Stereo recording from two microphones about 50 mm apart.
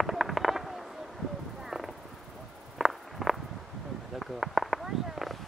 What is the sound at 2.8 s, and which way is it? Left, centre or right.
Walk, centre.